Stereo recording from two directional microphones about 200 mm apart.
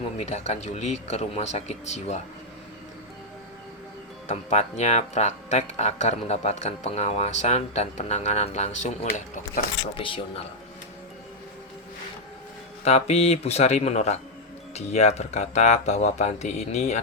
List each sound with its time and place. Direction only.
0.2 s speech: 35° left (ahead or behind)
4.3 s speech: 35° left (ahead or behind)
10.0 s a man's voice: 25° left (ahead or behind)
12.8 s speech: 30° left (ahead or behind)